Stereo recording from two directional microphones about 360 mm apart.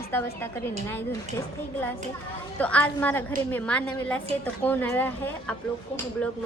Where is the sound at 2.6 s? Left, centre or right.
Centre.